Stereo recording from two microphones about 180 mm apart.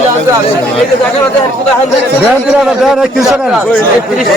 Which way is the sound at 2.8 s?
Centre (ahead or behind).